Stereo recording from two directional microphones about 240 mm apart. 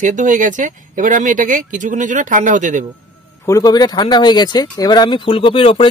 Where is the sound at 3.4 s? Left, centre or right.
Centre.